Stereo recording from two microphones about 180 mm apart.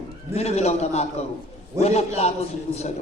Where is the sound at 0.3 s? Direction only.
35° left (ahead or behind).